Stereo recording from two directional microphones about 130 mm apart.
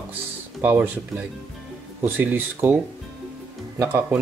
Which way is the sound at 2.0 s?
15° right (ahead or behind).